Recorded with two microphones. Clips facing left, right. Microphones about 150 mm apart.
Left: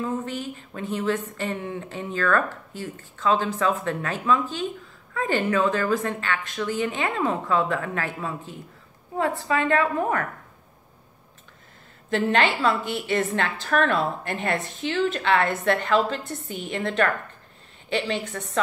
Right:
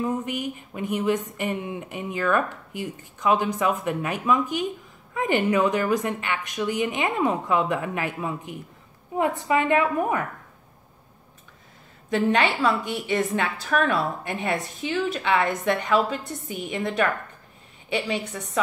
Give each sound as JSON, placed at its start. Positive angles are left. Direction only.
{"t": 0.0, "sound": "a woman's voice", "side_deg": -15}
{"t": 12.1, "sound": "a woman's voice", "side_deg": -10}